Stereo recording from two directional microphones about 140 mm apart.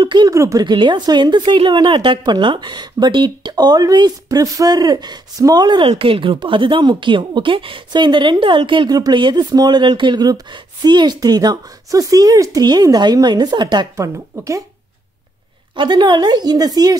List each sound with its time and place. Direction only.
0.0 s speech: 35° right (ahead or behind)
0.3 s speech: 20° right (ahead or behind)
15.7 s speech: 35° right (ahead or behind)